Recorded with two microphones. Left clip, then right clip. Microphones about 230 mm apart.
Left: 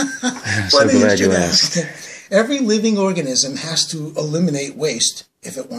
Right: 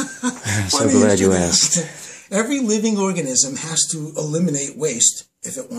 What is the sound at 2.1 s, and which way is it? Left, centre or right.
A man's voice, centre.